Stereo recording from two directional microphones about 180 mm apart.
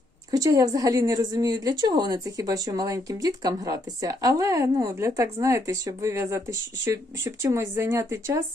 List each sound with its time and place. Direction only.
0.3 s speech: 20° right (ahead or behind)